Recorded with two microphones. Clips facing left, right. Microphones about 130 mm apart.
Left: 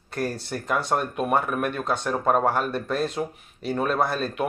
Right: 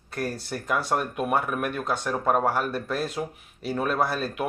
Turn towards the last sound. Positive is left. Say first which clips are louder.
# left 1 dB
turn(degrees=-5)  # may be behind; listen again after turning